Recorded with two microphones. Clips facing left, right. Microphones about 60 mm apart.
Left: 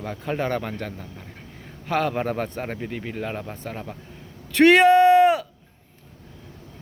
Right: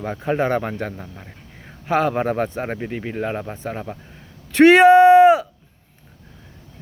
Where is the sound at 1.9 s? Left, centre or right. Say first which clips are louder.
Right 4 dB; centre.